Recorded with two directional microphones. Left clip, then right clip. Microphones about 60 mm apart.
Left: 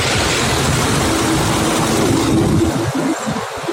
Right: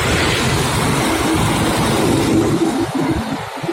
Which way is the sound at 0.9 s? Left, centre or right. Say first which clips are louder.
Even; centre.